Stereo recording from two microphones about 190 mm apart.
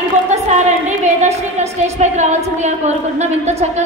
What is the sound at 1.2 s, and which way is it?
A woman's voice, 35° right (ahead or behind).